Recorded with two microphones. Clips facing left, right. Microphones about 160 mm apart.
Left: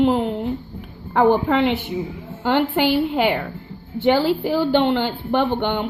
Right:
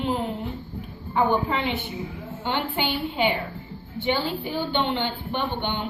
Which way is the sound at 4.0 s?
90° left.